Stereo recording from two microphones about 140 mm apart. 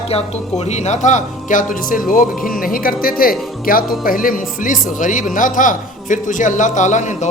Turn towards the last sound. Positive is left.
turn(degrees=60)  # may be behind; listen again after turning